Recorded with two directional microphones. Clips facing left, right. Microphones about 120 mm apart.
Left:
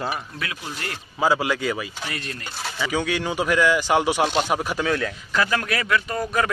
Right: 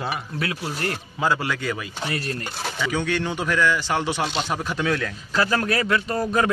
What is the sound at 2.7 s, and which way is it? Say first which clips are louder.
Speech: even; 10° left (ahead or behind).